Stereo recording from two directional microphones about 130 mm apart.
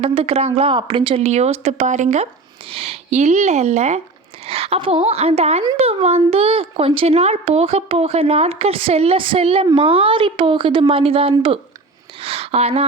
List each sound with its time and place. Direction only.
0.0 s speech: 45° right (ahead or behind)
0.7 s speech: 40° right (ahead or behind); by 2.2 s 65° right (ahead or behind)
2.6 s speech: 50° right (ahead or behind)
12.2 s a sound: 50° right (ahead or behind)